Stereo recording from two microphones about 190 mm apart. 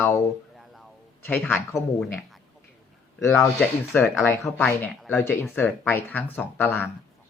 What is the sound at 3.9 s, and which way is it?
Speech, 15° left (ahead or behind).